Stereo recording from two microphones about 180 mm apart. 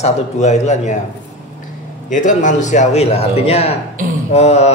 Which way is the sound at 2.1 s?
45° left (ahead or behind).